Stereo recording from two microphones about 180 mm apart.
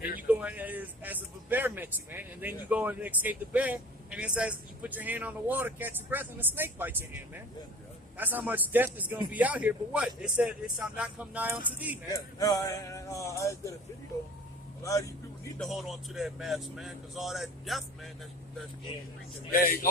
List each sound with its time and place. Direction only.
0.0 s speech: 10° right (ahead or behind)
8.2 s speech: 10° right (ahead or behind)
12.1 s speech: 20° left (ahead or behind)
14.8 s speech: 20° left (ahead or behind)
15.5 s speech: centre (ahead or behind)
19.5 s speech: 50° left (ahead or behind)